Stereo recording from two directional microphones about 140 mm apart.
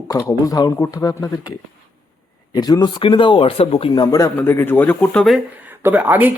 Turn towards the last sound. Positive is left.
turn(degrees=-10)  # may be behind; listen again after turning